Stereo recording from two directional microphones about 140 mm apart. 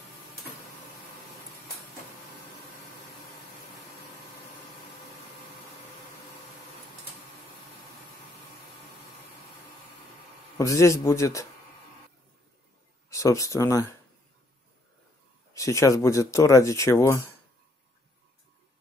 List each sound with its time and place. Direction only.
10.6 s speech: 20° left (ahead or behind)
13.1 s speech: 20° left (ahead or behind)
15.5 s speech: 20° left (ahead or behind)